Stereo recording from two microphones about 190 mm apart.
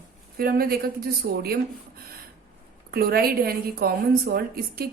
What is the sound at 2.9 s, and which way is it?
A woman's voice, 55° right (ahead or behind).